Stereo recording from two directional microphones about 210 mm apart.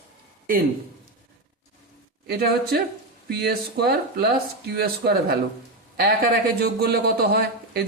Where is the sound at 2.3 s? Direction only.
45° right (ahead or behind).